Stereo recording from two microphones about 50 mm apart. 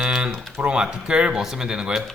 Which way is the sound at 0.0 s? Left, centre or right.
Centre.